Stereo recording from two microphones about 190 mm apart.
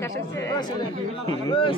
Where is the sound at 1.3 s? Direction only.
25° left (ahead or behind).